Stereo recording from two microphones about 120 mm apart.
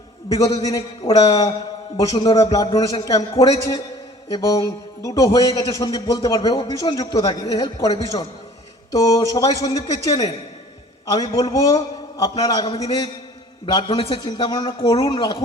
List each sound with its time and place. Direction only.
0.3 s speech: 30° left (ahead or behind)
1.0 s a man's voice: 55° left (ahead or behind)
2.1 s a man's voice: 40° left (ahead or behind)
13.9 s a man's voice: 50° left (ahead or behind)